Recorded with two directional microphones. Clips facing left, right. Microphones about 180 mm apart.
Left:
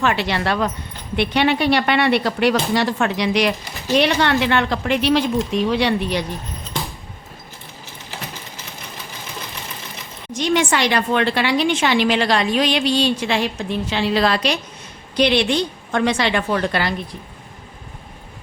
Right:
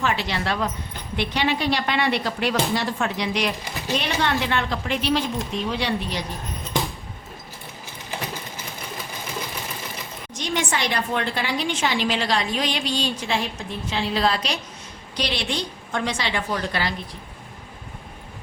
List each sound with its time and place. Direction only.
0.0 s a woman's voice: 65° left (ahead or behind)
10.3 s a woman's voice: 70° left (ahead or behind)
15.1 s a woman's voice: 60° left (ahead or behind)